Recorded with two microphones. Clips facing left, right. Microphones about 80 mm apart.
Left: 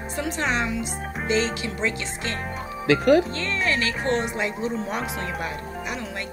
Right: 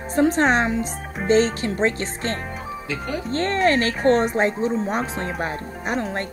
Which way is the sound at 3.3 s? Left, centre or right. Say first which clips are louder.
Right 7 dB; right.